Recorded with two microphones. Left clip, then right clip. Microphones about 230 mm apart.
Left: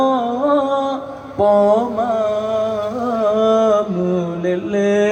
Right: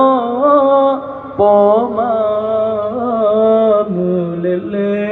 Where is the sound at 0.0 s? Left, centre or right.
Left.